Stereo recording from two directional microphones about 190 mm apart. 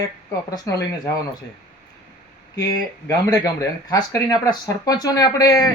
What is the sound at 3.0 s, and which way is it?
A woman's voice, 15° left (ahead or behind).